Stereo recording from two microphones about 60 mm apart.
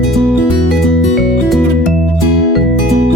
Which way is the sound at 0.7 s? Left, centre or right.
Centre.